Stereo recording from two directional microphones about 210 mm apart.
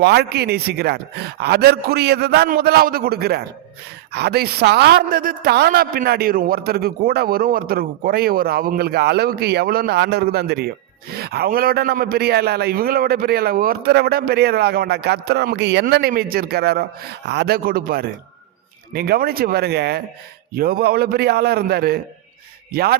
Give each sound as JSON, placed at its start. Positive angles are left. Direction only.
{"t": 0.0, "sound": "a man's voice", "side_deg": -50}